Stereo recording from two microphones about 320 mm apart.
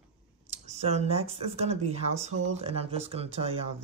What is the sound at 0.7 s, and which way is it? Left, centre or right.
Speech, right.